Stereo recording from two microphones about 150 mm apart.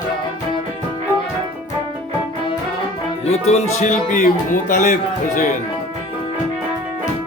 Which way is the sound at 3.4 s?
50° left (ahead or behind).